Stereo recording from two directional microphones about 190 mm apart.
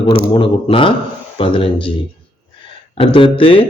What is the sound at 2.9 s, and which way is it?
Speech, 25° left (ahead or behind).